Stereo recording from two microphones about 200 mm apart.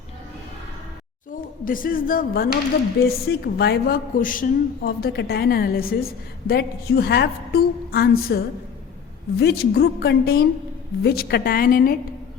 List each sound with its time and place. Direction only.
1.6 s a woman's voice: 45° left (ahead or behind)